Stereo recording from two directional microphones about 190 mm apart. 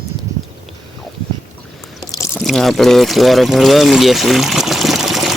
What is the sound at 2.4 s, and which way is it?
Pour, centre (ahead or behind).